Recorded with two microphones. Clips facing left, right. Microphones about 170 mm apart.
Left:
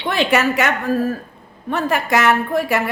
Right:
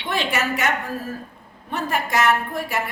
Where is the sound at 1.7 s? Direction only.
80° left.